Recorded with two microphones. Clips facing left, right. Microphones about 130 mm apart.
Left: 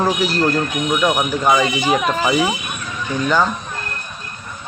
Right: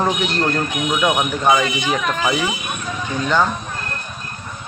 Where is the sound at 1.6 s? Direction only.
40° left (ahead or behind).